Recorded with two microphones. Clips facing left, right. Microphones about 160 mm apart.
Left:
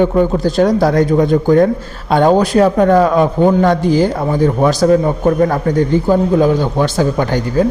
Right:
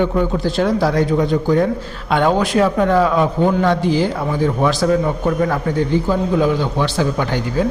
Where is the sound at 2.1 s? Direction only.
35° left (ahead or behind).